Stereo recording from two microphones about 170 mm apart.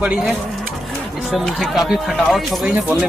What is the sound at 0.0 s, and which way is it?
Speech, 5° right (ahead or behind).